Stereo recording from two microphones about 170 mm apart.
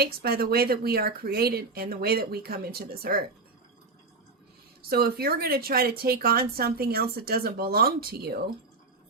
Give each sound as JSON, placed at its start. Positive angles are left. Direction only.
{"t": 0.0, "sound": "a woman's voice", "side_deg": -65}
{"t": 4.8, "sound": "a woman's voice", "side_deg": -65}